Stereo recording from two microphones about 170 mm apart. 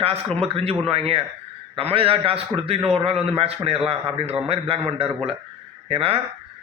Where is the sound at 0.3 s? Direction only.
35° right (ahead or behind).